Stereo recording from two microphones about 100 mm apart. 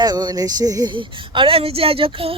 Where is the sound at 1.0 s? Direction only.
60° right (ahead or behind).